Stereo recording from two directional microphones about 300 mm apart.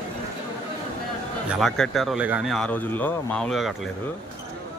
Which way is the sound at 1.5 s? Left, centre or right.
Centre.